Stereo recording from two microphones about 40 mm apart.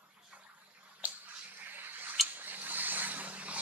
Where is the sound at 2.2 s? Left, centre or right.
Right.